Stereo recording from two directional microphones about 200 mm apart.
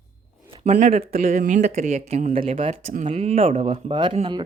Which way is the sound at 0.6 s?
35° right (ahead or behind).